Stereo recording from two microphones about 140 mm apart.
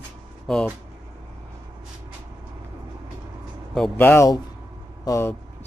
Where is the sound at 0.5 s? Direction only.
5° left (ahead or behind).